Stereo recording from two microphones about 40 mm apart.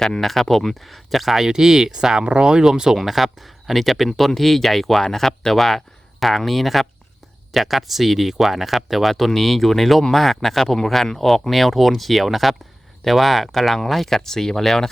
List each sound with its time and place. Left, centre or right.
0.0 s speech: centre
1.5 s speech: centre
2.2 s speech: right
3.0 s speech: centre
14.2 s speech: centre